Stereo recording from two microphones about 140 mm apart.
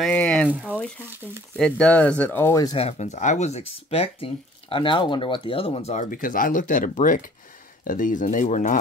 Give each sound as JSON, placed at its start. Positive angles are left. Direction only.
{"t": 0.0, "sound": "speech", "side_deg": 10}
{"t": 0.5, "sound": "speech", "side_deg": -10}
{"t": 1.6, "sound": "speech", "side_deg": 10}
{"t": 2.6, "sound": "speech", "side_deg": 40}
{"t": 6.0, "sound": "speech", "side_deg": 75}